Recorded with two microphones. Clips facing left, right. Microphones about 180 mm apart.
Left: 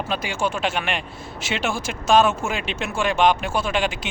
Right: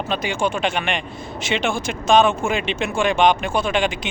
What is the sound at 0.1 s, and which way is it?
A man's voice, 5° left (ahead or behind).